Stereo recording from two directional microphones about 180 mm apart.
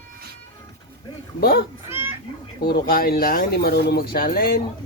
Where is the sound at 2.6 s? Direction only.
55° left (ahead or behind).